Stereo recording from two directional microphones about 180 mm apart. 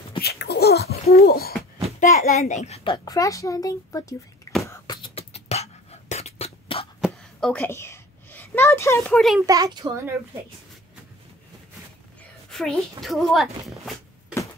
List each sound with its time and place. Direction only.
0.2 s laughter: 65° left (ahead or behind)
1.1 s speech: 55° left (ahead or behind)
2.0 s a child's voice: 45° left (ahead or behind); by 4.1 s 20° left (ahead or behind)
4.6 s beatboxing: 15° left (ahead or behind)
5.0 s beatboxing: 35° left (ahead or behind)
7.0 s a sound: 5° left (ahead or behind)
9.5 s a child's voice: 20° right (ahead or behind)
12.4 s a sound: centre (ahead or behind)
13.0 s a woman's voice: centre (ahead or behind)